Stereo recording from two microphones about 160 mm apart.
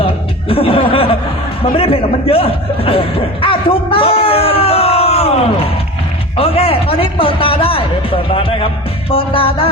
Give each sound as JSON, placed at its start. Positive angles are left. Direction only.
{"t": 0.0, "sound": "chuckle", "side_deg": 35}
{"t": 0.9, "sound": "a sound", "side_deg": 35}
{"t": 1.7, "sound": "chuckle", "side_deg": 35}
{"t": 6.3, "sound": "a man's voice", "side_deg": 35}